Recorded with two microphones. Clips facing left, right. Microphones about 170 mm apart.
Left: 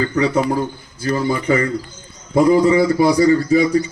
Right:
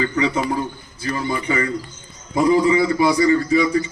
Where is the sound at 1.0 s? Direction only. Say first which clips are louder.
Left 5 dB; 40° left (ahead or behind).